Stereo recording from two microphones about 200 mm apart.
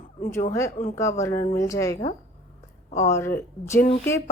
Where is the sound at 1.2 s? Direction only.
15° left (ahead or behind).